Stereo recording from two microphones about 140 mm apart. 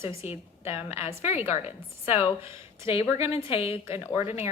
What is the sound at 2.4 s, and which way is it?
Speech, 20° right (ahead or behind).